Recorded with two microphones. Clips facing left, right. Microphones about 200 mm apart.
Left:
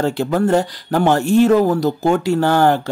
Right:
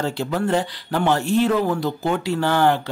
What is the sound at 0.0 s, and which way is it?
Speech, 50° left (ahead or behind).